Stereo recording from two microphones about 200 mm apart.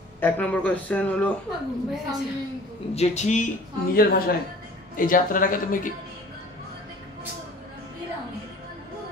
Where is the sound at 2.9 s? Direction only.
35° left (ahead or behind).